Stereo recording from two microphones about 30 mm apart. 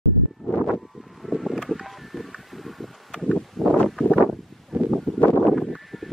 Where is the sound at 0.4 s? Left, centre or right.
Centre.